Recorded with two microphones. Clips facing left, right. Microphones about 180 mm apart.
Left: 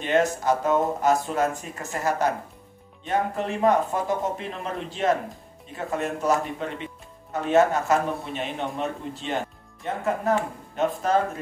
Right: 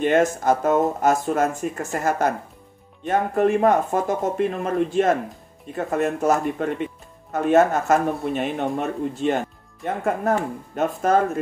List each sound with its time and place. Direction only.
0.0 s speech: 50° right (ahead or behind)